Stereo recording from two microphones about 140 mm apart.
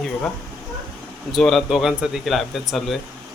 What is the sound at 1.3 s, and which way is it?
Speech, centre (ahead or behind).